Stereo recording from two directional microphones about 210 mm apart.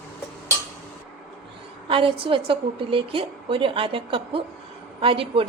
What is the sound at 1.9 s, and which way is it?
A woman's voice, 25° right (ahead or behind).